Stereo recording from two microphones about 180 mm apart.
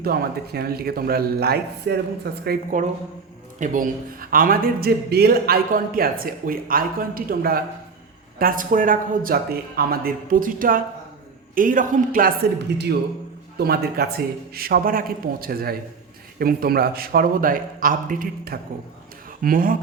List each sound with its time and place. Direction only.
0.0 s a man's voice: 60° right (ahead or behind)
3.6 s a man's voice: 45° right (ahead or behind)
12.7 s a man's voice: 65° right (ahead or behind); by 19.7 s 50° right (ahead or behind)